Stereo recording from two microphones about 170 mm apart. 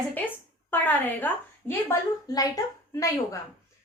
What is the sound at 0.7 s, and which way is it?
A woman's voice, 10° left (ahead or behind).